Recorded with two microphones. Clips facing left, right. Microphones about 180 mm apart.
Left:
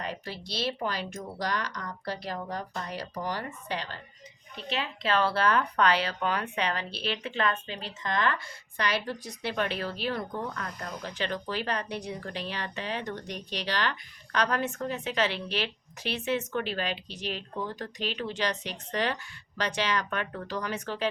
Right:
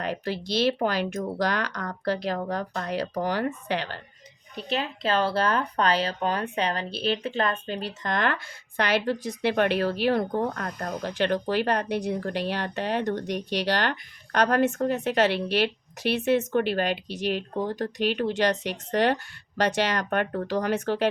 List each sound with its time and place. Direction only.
0.7 s speech: 70° right (ahead or behind)
2.4 s speech: 60° right (ahead or behind)
4.7 s speech: 45° right (ahead or behind)
7.9 s speech: 60° right (ahead or behind)
8.8 s speech: 75° right (ahead or behind)
10.3 s speech: 55° right (ahead or behind)
11.1 s speech: 65° right (ahead or behind)
14.3 s speech: 60° right (ahead or behind)
20.5 s speech: 60° right (ahead or behind)